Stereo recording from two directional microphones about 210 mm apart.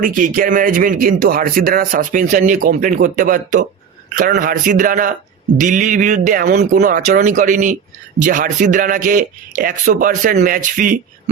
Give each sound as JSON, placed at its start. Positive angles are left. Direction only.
{"t": 0.0, "sound": "speech", "side_deg": -40}